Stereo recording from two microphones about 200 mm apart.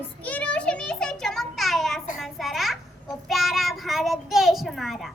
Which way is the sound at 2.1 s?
Centre (ahead or behind).